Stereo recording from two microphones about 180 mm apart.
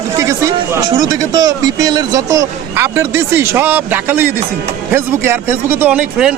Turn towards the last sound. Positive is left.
turn(degrees=-5)  # may be behind; listen again after turning